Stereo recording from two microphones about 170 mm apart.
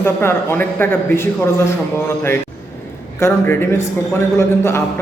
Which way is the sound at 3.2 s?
15° left (ahead or behind).